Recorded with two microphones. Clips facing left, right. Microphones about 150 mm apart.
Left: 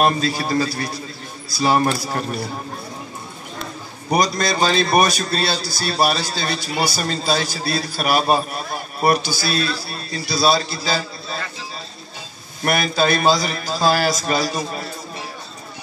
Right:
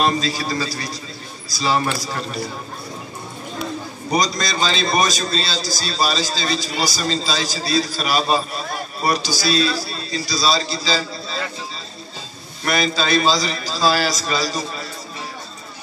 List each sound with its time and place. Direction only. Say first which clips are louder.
0.0 s a man's voice: left 2 dB; 55° left (ahead or behind)
4.1 s a man's voice: left 2 dB; 60° left (ahead or behind)
12.6 s a man's voice: left 2 dB; 55° left (ahead or behind)